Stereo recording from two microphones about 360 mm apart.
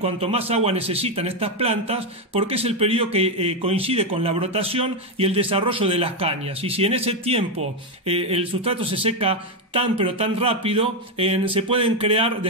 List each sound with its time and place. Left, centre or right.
0.0 s a man's voice: centre